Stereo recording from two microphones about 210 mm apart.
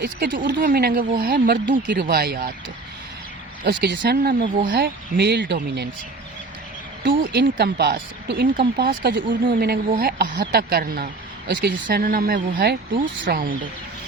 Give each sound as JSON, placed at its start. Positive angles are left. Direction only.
{"t": 0.0, "sound": "speech", "side_deg": -45}
{"t": 3.6, "sound": "speech", "side_deg": -50}
{"t": 4.0, "sound": "speech", "side_deg": -40}
{"t": 5.1, "sound": "speech", "side_deg": -55}
{"t": 7.2, "sound": "speech", "side_deg": -40}
{"t": 9.0, "sound": "speech", "side_deg": -60}
{"t": 9.5, "sound": "speech", "side_deg": -45}